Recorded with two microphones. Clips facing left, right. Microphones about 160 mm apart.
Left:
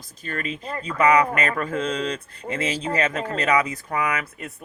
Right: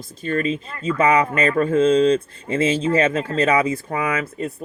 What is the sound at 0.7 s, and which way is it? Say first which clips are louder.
Speech: right 5 dB; 35° left (ahead or behind).